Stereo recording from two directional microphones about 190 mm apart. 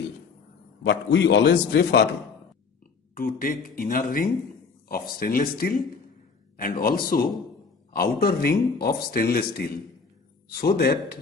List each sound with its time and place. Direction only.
0.8 s a man's voice: 65° left (ahead or behind)
3.2 s speech: 50° left (ahead or behind)